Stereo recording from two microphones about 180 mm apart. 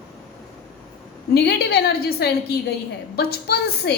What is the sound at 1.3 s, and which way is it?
A woman's voice, 60° left (ahead or behind).